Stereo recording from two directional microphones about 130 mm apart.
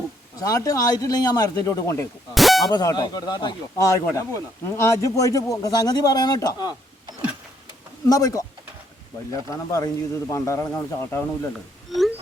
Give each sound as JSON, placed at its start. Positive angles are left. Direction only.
{"t": 0.3, "sound": "speech", "side_deg": 25}
{"t": 2.3, "sound": "a sound", "side_deg": 0}
{"t": 2.6, "sound": "speech", "side_deg": 30}
{"t": 8.0, "sound": "speech", "side_deg": 30}
{"t": 11.9, "sound": "wail", "side_deg": 0}